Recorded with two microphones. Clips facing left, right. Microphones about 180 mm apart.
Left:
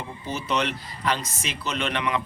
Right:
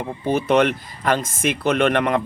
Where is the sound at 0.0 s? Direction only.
55° right (ahead or behind).